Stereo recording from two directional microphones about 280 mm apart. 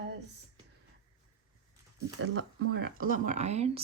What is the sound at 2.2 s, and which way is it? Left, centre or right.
Speech, right.